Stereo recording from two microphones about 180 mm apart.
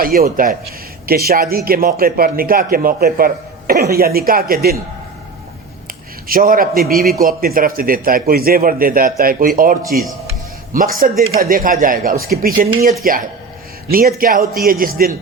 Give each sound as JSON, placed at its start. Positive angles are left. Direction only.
{"t": 0.0, "sound": "a man's voice", "side_deg": -55}
{"t": 6.2, "sound": "a man's voice", "side_deg": -50}